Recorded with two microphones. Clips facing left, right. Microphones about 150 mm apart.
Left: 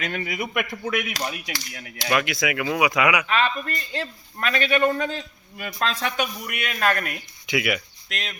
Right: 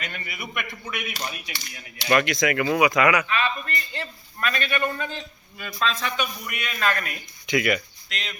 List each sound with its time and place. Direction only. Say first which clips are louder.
0.0 s speech: left 7 dB; 85° left
2.0 s speech: right 2 dB; 5° left (ahead or behind)
3.2 s a man's voice: left 3 dB; 75° left (ahead or behind); by 7.1 s 55° left (ahead or behind)
7.4 s speech: right 2 dB; 5° left (ahead or behind)
8.1 s speech: left 2 dB; 50° left (ahead or behind)